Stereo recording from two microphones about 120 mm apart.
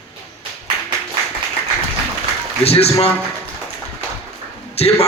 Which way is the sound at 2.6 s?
55° left (ahead or behind).